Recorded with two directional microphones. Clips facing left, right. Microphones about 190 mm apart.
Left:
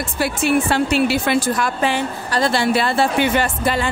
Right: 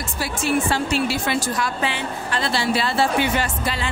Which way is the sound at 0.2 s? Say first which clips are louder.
Left 4 dB; 60° left (ahead or behind).